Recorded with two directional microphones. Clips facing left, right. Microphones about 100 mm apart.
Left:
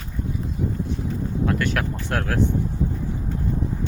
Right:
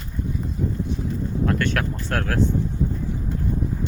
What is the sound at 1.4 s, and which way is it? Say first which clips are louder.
Speech: right 1 dB; 15° left (ahead or behind).